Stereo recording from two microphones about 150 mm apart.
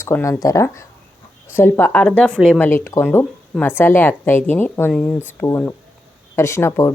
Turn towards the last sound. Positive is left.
turn(degrees=20)  # may be behind; listen again after turning